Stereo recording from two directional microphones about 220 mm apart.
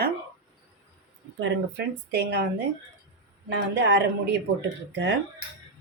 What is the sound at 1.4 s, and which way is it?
A woman's voice, 55° right (ahead or behind).